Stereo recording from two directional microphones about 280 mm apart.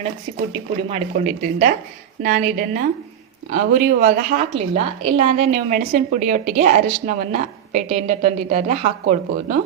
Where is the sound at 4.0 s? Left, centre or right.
Right.